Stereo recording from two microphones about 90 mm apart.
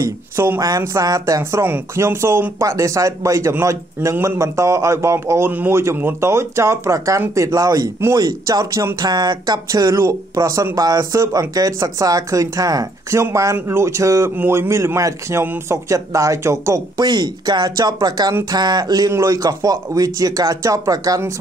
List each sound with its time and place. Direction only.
0.0 s a man's voice: 30° right (ahead or behind)
2.6 s speech: 35° right (ahead or behind)
14.3 s a man's voice: 25° right (ahead or behind)
15.4 s a man's voice: 20° right (ahead or behind)
15.9 s speech: 35° right (ahead or behind)